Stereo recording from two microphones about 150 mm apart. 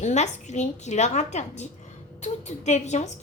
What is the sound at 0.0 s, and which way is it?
A woman's voice, 50° left (ahead or behind).